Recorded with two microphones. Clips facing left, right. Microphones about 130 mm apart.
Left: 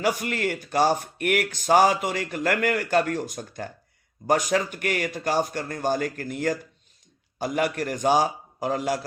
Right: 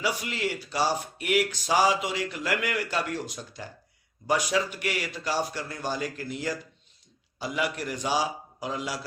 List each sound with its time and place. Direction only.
0.0 s speech: 50° left (ahead or behind)